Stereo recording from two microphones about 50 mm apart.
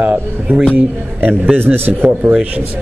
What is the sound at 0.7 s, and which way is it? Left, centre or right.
A man's voice, right.